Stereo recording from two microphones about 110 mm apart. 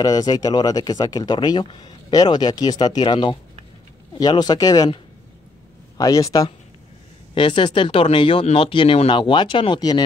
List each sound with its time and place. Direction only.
0.0 s speech: 35° left (ahead or behind)
7.3 s speech: 50° left (ahead or behind)